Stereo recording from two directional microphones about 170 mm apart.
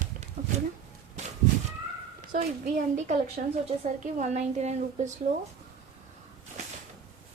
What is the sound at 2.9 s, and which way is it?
A woman's voice, 45° right (ahead or behind).